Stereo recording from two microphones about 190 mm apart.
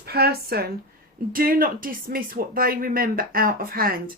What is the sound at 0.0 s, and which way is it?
Speech, 55° right (ahead or behind).